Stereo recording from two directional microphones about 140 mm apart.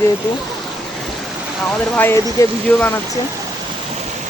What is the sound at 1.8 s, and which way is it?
Speech, 15° left (ahead or behind).